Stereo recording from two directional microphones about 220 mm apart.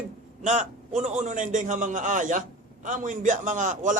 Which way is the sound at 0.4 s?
30° right (ahead or behind).